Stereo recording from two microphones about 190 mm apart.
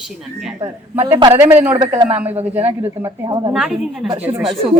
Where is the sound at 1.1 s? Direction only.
25° right (ahead or behind).